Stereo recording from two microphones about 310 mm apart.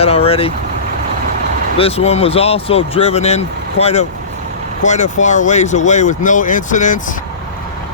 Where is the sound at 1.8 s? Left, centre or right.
Centre.